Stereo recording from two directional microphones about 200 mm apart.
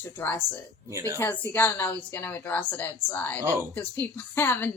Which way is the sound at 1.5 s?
10° left (ahead or behind).